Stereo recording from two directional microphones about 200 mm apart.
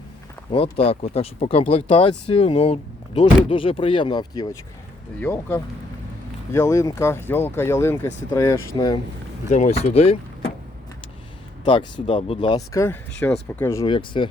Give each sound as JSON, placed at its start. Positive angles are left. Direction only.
{"t": 0.5, "sound": "speech", "side_deg": 30}
{"t": 9.5, "sound": "speech", "side_deg": 35}
{"t": 11.6, "sound": "speech", "side_deg": 25}
{"t": 13.8, "sound": "speech", "side_deg": 25}